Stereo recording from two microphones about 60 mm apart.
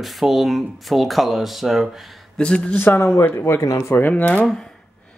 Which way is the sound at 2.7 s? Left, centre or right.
Left.